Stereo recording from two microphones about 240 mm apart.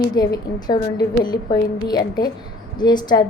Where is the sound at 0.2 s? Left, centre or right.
Centre.